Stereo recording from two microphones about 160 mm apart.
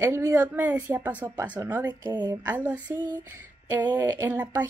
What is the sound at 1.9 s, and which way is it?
Speech, 25° right (ahead or behind).